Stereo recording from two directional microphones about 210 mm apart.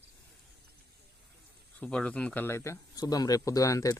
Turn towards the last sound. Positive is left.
turn(degrees=15)  # may be behind; listen again after turning